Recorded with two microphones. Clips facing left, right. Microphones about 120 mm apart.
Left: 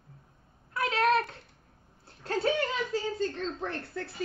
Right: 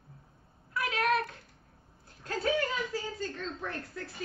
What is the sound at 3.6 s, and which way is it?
Speech, 30° left (ahead or behind).